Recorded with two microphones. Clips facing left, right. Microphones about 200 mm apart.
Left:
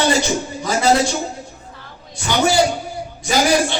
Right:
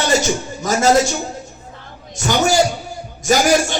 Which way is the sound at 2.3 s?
45° right (ahead or behind).